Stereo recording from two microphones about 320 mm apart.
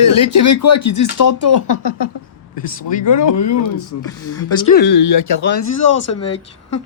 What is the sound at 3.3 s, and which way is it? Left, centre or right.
Speech, left.